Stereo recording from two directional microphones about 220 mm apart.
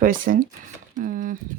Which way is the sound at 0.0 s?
40° right (ahead or behind).